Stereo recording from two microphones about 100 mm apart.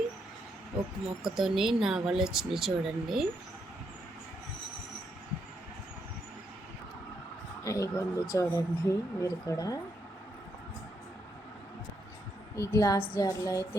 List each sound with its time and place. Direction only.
1.2 s speech: 5° right (ahead or behind)
7.6 s speech: 30° left (ahead or behind)
12.5 s speech: 35° left (ahead or behind)